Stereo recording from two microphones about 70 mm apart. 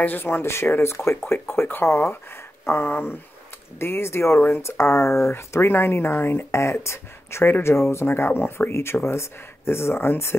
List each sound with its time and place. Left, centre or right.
0.0 s speech: left
2.6 s a sound: left
3.8 s speech: left